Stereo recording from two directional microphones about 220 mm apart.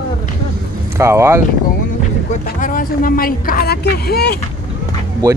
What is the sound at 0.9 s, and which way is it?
Speech, 10° right (ahead or behind).